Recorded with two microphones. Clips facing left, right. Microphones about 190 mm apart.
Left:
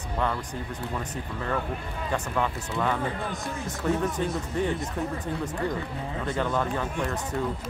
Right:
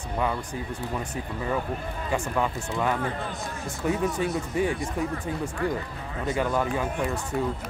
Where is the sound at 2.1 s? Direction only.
10° right (ahead or behind).